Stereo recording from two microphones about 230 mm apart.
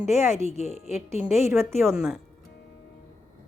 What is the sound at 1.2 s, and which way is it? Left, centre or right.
Speech, centre.